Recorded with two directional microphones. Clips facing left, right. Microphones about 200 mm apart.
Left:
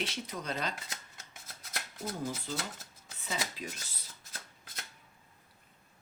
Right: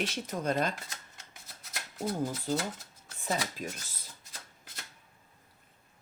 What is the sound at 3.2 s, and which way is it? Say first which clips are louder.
Speech: right 5 dB; 45° right (ahead or behind).